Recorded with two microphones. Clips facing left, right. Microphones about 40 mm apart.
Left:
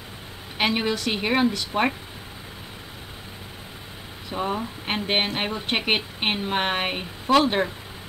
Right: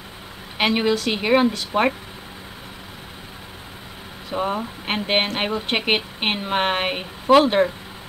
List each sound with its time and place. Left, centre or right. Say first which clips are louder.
0.6 s a woman's voice: right 4 dB; centre
4.3 s speech: right 3 dB; centre